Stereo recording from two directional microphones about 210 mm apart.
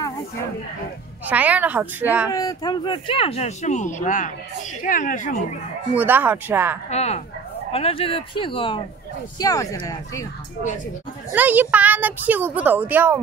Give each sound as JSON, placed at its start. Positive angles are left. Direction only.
{"t": 1.2, "sound": "speech", "side_deg": -5}
{"t": 2.3, "sound": "speech", "side_deg": 20}
{"t": 5.9, "sound": "speech", "side_deg": -10}
{"t": 6.9, "sound": "speech", "side_deg": 30}
{"t": 11.3, "sound": "speech", "side_deg": -10}